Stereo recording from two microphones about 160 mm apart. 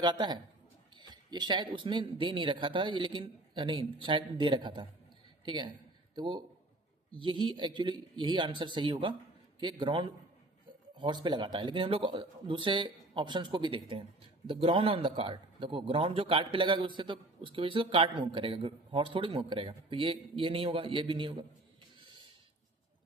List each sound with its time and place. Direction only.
0.0 s a man's voice: 25° right (ahead or behind)
6.1 s a man's voice: 30° right (ahead or behind)